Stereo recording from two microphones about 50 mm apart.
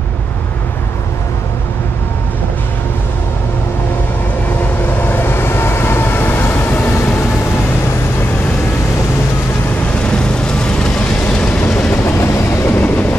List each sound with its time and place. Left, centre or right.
5.0 s train: left
10.0 s vehicle: centre
12.0 s train: left